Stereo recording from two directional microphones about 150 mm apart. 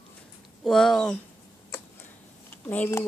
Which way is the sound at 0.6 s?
Centre (ahead or behind).